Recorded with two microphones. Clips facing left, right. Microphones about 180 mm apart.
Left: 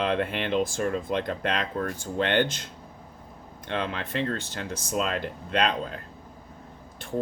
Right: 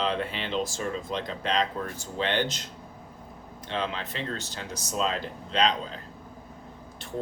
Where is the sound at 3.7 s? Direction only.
60° left (ahead or behind).